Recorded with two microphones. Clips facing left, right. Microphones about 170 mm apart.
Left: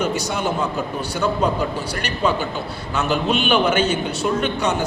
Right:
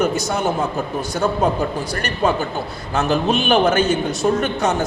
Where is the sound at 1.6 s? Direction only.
50° right (ahead or behind).